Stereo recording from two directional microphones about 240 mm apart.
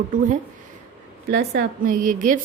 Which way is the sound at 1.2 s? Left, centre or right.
Right.